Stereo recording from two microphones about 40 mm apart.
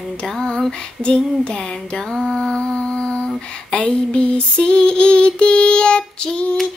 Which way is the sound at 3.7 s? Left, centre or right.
Left.